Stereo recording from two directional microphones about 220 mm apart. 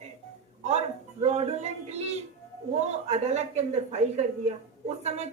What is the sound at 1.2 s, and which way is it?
A woman's voice, 30° right (ahead or behind).